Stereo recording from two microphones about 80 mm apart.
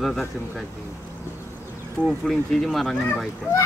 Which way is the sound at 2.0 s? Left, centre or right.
Centre.